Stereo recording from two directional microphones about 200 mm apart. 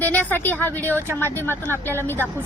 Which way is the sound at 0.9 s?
10° right (ahead or behind).